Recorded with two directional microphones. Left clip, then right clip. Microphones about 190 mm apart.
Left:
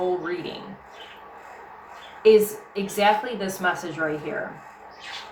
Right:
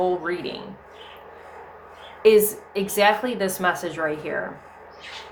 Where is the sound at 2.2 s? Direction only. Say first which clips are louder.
Even; 40° right (ahead or behind).